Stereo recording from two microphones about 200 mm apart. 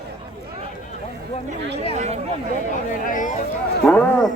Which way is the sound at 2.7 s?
40° left (ahead or behind).